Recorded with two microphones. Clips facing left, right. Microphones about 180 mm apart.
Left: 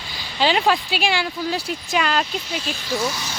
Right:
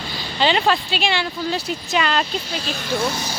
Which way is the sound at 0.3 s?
5° left (ahead or behind).